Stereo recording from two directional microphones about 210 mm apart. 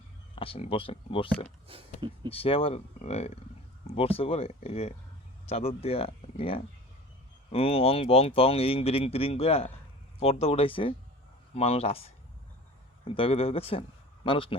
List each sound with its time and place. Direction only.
0.3 s speech: 25° left (ahead or behind)
1.6 s a sound: 25° right (ahead or behind)
2.0 s speech: 20° right (ahead or behind)
2.3 s speech: 25° left (ahead or behind)